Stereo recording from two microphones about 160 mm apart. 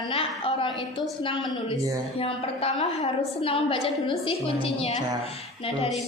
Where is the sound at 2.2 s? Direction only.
35° left (ahead or behind).